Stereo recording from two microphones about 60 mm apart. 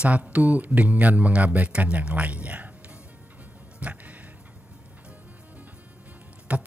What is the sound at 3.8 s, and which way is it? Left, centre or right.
Music, right.